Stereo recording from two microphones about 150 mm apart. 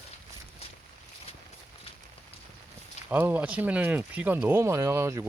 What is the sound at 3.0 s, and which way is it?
Speech, 10° right (ahead or behind).